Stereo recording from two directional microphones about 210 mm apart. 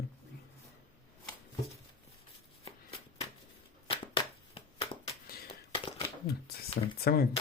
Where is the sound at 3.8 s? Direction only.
25° left (ahead or behind).